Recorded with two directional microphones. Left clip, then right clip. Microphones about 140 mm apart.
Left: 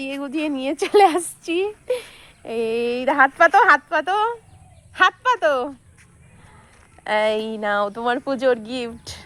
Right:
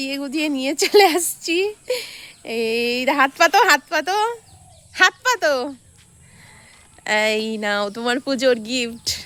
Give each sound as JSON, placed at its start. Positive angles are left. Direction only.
{"t": 0.0, "sound": "speech", "side_deg": -40}
{"t": 7.0, "sound": "speech", "side_deg": -55}